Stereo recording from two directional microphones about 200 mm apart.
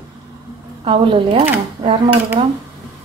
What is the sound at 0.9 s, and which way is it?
Speech, 25° right (ahead or behind).